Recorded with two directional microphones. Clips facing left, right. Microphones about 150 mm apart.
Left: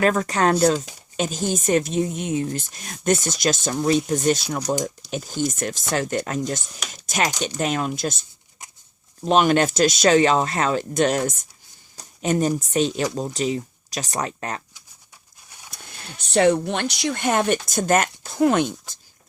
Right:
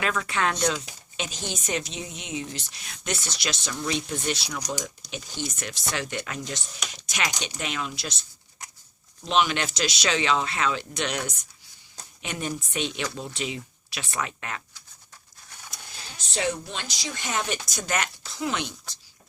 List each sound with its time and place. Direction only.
0.0 s speech: 45° left (ahead or behind)
9.2 s speech: 50° left (ahead or behind)
15.7 s speech: 60° left (ahead or behind)